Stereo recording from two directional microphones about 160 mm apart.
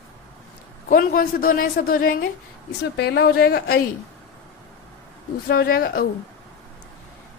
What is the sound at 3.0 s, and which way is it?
Speech, 80° left.